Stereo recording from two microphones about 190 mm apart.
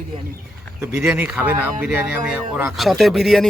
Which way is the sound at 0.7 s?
10° right (ahead or behind).